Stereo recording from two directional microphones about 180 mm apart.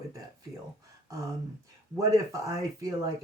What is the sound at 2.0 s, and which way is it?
Speech, 20° right (ahead or behind).